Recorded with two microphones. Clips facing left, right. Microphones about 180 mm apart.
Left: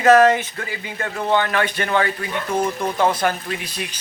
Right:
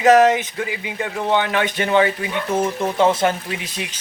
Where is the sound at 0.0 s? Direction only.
15° right (ahead or behind).